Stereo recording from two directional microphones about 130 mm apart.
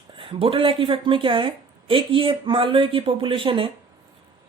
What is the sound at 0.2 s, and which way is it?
A woman's voice, 45° right (ahead or behind).